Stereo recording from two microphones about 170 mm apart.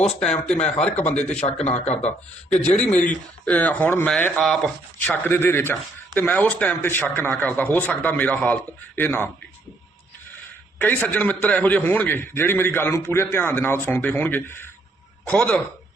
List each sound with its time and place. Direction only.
0.0 s speech: 40° left (ahead or behind)
1.1 s a man's voice: 5° left (ahead or behind)
1.6 s speech: 40° left (ahead or behind)
2.7 s a man's voice: 10° left (ahead or behind)
10.8 s a man's voice: 10° left (ahead or behind)